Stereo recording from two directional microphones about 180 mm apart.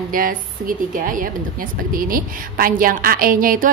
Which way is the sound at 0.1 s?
50° right (ahead or behind).